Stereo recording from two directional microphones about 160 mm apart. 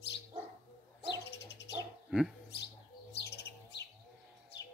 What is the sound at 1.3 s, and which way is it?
Dog, 90° left.